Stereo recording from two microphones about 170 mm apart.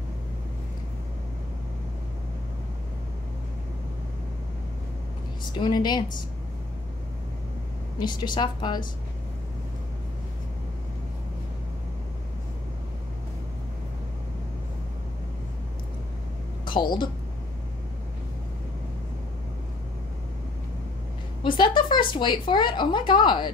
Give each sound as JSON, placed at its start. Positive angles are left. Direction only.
{"t": 5.5, "sound": "a woman's voice", "side_deg": 25}
{"t": 8.0, "sound": "a woman's voice", "side_deg": 25}
{"t": 16.6, "sound": "a woman's voice", "side_deg": 30}
{"t": 21.4, "sound": "a woman's voice", "side_deg": 30}